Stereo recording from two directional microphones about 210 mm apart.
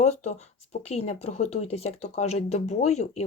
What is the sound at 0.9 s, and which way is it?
Speech, 30° left (ahead or behind).